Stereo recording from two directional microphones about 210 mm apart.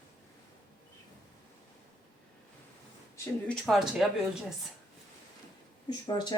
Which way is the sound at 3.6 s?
Centre (ahead or behind).